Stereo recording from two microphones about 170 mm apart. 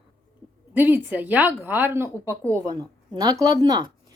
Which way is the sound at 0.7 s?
10° right (ahead or behind).